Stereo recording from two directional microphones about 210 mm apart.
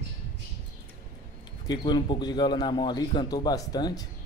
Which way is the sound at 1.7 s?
20° left (ahead or behind).